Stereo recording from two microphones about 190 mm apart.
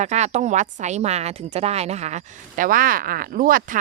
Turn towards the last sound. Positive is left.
turn(degrees=-50)  # may be behind; listen again after turning